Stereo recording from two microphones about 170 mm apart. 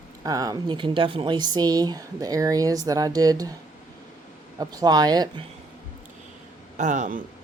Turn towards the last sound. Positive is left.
turn(degrees=-50)  # may be behind; listen again after turning